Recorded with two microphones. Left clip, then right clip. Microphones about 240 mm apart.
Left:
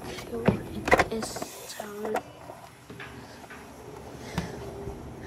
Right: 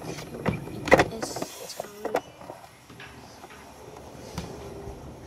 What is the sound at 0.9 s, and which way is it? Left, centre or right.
Power windows, centre.